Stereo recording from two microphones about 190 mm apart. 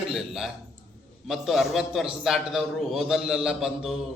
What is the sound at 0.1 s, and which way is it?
A man's voice, centre (ahead or behind).